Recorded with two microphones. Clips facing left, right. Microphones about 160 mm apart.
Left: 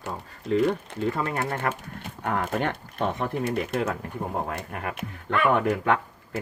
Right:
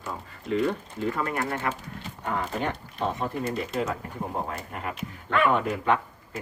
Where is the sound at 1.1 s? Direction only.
30° left (ahead or behind).